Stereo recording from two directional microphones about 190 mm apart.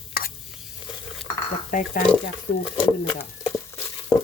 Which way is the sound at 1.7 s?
45° left (ahead or behind).